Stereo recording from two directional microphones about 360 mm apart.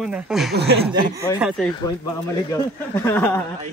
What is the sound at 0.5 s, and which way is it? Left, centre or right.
Speech, right.